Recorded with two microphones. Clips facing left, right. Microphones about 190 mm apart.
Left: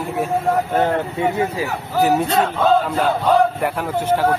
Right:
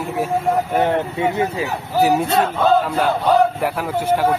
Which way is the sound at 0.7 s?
15° right (ahead or behind).